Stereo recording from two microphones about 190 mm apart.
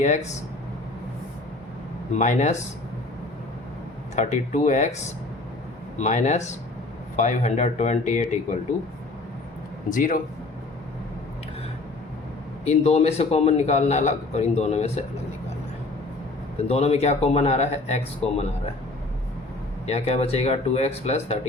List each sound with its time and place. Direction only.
0.0 s a man's voice: 40° left (ahead or behind)
2.1 s a man's voice: 40° left (ahead or behind)
4.1 s a man's voice: 40° left (ahead or behind)
6.0 s a man's voice: 40° left (ahead or behind)
9.9 s speech: 45° left (ahead or behind)
12.6 s a man's voice: 35° left (ahead or behind)
16.6 s a man's voice: 35° left (ahead or behind)
19.9 s a man's voice: 35° left (ahead or behind)